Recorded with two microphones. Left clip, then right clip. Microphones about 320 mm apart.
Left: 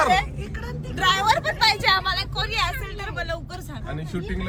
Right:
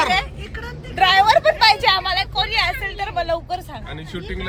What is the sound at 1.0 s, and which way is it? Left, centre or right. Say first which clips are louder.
Vehicle: right 7 dB; centre.